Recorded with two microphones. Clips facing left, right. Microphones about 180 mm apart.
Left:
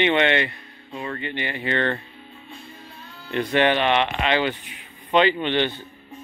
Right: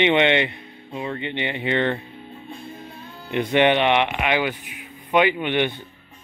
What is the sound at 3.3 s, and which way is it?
Speech, 15° right (ahead or behind).